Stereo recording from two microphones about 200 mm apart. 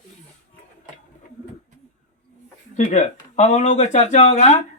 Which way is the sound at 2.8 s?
35° left (ahead or behind).